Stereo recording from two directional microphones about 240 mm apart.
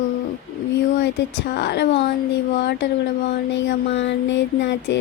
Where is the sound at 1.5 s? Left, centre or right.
Left.